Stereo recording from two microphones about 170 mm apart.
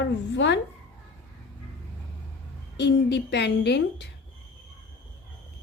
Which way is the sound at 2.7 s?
90° left.